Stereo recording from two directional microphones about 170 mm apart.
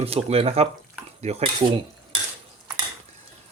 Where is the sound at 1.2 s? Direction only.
40° right (ahead or behind).